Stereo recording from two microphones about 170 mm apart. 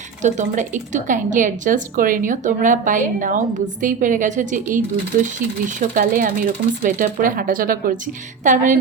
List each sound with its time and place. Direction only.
0.2 s a woman's voice: 45° right (ahead or behind)